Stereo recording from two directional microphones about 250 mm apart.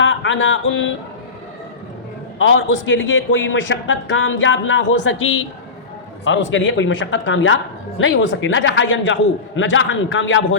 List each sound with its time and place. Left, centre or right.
0.0 s music: left
2.4 s a man's voice: left